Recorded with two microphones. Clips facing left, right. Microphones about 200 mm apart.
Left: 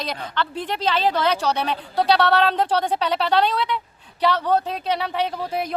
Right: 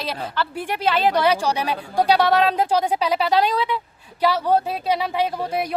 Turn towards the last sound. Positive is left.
turn(degrees=-10)  # may be behind; listen again after turning